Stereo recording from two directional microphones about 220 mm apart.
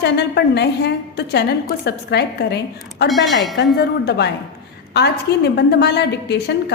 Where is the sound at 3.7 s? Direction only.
50° left (ahead or behind).